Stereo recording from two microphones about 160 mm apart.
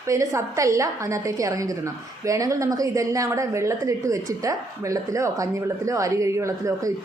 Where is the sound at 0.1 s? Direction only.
20° right (ahead or behind).